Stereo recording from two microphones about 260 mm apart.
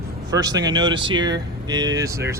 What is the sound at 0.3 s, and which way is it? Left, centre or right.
Speech, centre.